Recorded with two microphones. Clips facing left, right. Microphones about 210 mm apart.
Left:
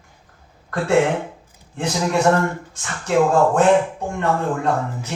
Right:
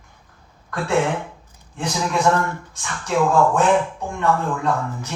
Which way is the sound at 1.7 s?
35° left (ahead or behind).